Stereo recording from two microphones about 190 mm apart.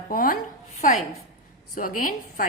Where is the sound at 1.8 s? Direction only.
45° left (ahead or behind).